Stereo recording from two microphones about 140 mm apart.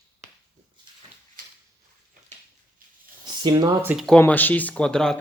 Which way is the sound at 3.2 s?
30° right (ahead or behind).